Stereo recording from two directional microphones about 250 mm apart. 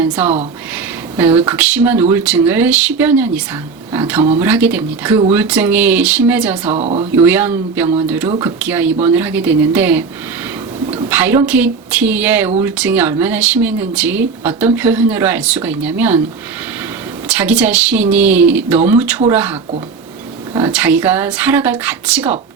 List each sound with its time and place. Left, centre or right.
0.0 s speech: centre
6.7 s speech: right
7.2 s speech: centre
11.1 s speech: centre
17.2 s speech: centre